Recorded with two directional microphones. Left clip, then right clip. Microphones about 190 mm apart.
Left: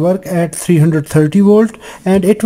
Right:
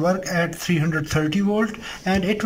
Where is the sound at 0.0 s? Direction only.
25° left (ahead or behind).